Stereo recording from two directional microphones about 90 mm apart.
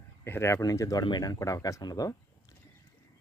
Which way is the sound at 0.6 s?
40° left (ahead or behind).